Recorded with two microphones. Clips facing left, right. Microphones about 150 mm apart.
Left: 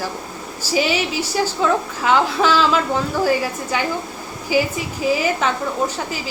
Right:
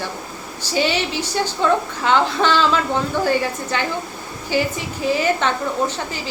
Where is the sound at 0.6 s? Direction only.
5° left (ahead or behind).